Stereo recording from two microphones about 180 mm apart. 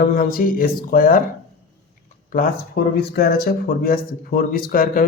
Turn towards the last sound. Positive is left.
turn(degrees=50)  # may be behind; listen again after turning